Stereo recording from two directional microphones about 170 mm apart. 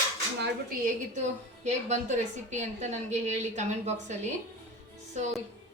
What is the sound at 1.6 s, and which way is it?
A woman's voice, 45° right (ahead or behind).